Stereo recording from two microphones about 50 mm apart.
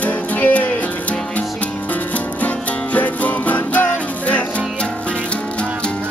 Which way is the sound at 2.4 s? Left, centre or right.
Left.